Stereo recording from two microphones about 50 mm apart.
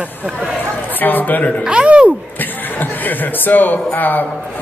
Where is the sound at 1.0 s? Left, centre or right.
Left.